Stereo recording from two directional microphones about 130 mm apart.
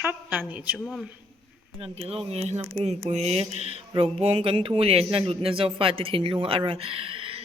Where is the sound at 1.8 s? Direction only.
50° right (ahead or behind).